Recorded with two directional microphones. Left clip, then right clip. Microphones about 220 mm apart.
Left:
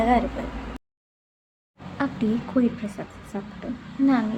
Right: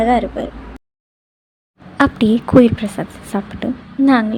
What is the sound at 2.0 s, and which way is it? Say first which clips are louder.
A woman's voice: right 12 dB; 45° right (ahead or behind).